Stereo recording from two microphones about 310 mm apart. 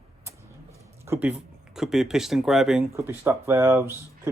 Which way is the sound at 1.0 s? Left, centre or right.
Centre.